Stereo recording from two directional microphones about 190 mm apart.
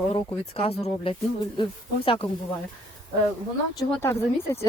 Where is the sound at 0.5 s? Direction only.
30° left (ahead or behind).